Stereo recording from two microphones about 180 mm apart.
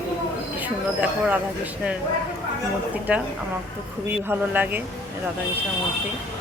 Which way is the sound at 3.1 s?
5° right (ahead or behind).